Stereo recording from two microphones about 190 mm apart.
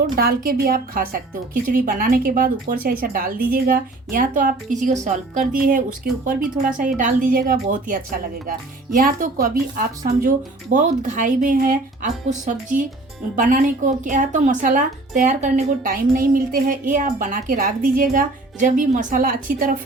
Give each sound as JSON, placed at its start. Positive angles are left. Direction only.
{"t": 0.2, "sound": "speech", "side_deg": -55}